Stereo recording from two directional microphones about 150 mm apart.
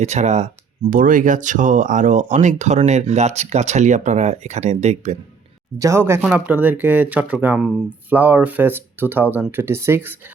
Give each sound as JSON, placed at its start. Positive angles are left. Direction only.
{"t": 0.0, "sound": "speech", "side_deg": -50}
{"t": 0.9, "sound": "speech", "side_deg": -65}
{"t": 5.8, "sound": "speech", "side_deg": -20}